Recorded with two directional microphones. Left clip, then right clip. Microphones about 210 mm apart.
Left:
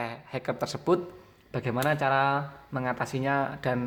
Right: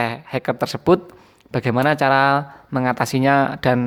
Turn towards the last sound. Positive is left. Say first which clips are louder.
# right 11 dB
turn(degrees=-40)  # may be behind; listen again after turning